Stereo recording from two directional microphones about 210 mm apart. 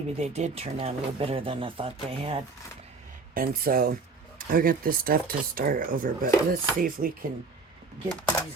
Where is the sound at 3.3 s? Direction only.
45° right (ahead or behind).